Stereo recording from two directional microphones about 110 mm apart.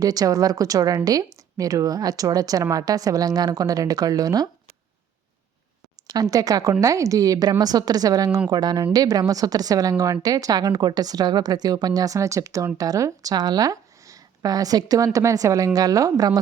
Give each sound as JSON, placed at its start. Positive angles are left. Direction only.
{"t": 0.0, "sound": "speech", "side_deg": -35}
{"t": 6.3, "sound": "speech", "side_deg": -30}